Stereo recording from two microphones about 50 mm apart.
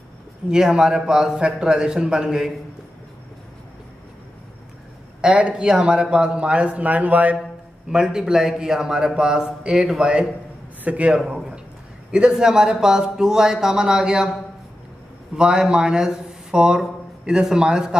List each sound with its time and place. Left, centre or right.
0.5 s a man's voice: centre
5.2 s a man's voice: centre
7.9 s a man's voice: centre
10.8 s speech: right
11.1 s a sound: centre
12.1 s a man's voice: centre
15.3 s a man's voice: centre